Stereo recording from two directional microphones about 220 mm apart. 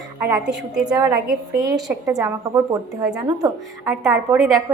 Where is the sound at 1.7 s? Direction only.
15° right (ahead or behind).